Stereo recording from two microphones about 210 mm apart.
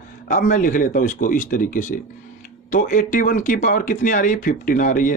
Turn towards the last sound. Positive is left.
turn(degrees=40)  # may be behind; listen again after turning